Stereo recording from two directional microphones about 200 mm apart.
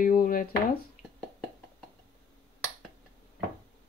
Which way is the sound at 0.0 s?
45° left (ahead or behind).